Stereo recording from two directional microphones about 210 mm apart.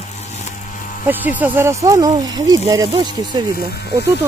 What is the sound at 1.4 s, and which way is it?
Speech, 10° right (ahead or behind).